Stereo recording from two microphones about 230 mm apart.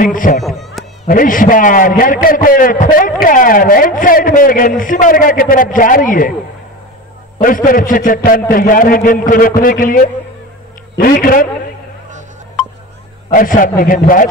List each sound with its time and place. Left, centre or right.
0.0 s a man's voice: left
0.4 s a sound: centre
1.0 s a man's voice: left
7.3 s a man's voice: left
13.3 s a man's voice: left